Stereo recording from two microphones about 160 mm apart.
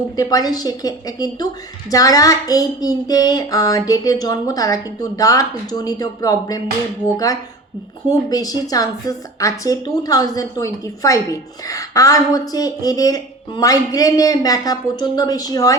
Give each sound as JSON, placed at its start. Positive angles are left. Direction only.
{"t": 0.2, "sound": "a woman's voice", "side_deg": 25}
{"t": 8.3, "sound": "a woman's voice", "side_deg": 25}